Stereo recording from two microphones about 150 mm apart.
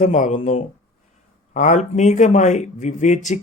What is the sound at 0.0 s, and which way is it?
Speech, 55° left (ahead or behind).